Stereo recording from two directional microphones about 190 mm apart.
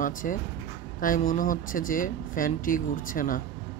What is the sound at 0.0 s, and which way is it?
Speech, 45° left (ahead or behind).